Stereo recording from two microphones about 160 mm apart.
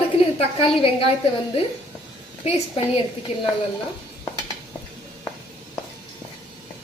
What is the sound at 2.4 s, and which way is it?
Speech, 40° left (ahead or behind).